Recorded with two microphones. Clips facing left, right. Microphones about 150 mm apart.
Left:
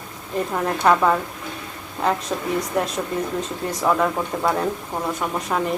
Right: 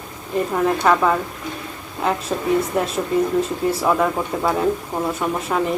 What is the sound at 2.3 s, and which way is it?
Speech, 10° right (ahead or behind).